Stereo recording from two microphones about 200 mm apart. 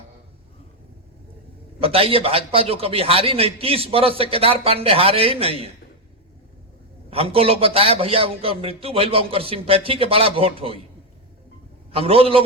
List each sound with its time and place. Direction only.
1.8 s a man's voice: 30° right (ahead or behind)
7.1 s a man's voice: 30° right (ahead or behind)
11.9 s a man's voice: 30° right (ahead or behind)